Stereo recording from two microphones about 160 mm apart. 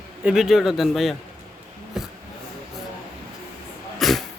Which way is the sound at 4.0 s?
Centre (ahead or behind).